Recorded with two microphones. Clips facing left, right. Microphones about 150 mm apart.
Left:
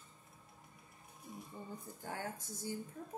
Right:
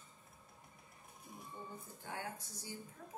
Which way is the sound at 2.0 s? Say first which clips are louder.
Left 2 dB; 50° left (ahead or behind).